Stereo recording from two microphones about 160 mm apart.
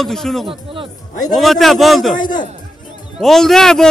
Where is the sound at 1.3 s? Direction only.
Centre (ahead or behind).